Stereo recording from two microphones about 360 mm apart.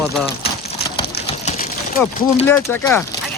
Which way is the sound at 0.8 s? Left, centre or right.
Centre.